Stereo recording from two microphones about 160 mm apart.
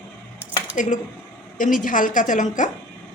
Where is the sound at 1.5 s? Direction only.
55° left (ahead or behind).